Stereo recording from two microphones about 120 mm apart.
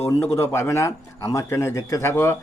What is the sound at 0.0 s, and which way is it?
A man's voice, 20° left (ahead or behind).